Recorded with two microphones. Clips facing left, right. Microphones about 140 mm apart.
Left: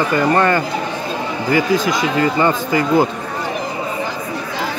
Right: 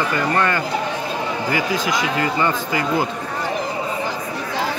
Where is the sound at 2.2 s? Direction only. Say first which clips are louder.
Left 4 dB; 35° left (ahead or behind).